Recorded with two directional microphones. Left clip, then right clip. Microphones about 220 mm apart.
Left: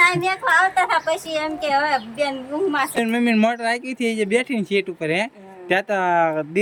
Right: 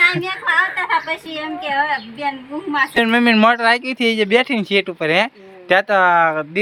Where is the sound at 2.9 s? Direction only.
5° left (ahead or behind).